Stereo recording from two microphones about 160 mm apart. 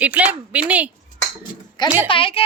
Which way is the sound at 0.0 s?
10° right (ahead or behind).